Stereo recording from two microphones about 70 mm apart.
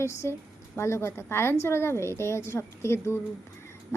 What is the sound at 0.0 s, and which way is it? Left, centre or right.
A woman's voice, left.